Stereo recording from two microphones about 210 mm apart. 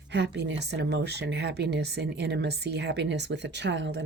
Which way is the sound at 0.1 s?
55° right (ahead or behind).